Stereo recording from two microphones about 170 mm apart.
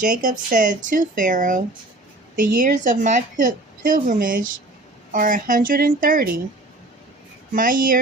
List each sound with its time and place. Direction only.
0.0 s a woman's voice: 50° right (ahead or behind)
7.5 s a woman's voice: 55° right (ahead or behind)